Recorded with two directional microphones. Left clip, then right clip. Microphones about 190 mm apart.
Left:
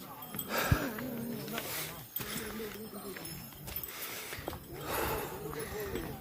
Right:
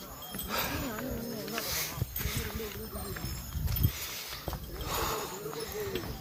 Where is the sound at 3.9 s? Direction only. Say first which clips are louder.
Right 2 dB; 50° left (ahead or behind).